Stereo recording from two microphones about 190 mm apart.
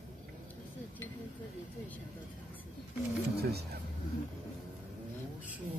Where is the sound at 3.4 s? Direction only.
55° right (ahead or behind).